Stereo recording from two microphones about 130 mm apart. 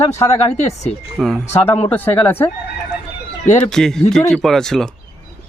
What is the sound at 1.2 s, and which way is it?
Speech, centre (ahead or behind).